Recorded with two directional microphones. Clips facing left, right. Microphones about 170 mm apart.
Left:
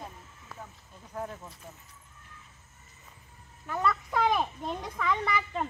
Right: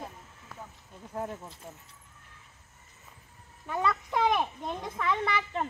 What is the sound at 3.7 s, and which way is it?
A child's voice, centre (ahead or behind).